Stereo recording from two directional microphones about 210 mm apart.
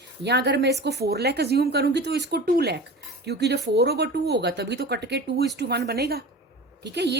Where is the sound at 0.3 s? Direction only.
55° right (ahead or behind).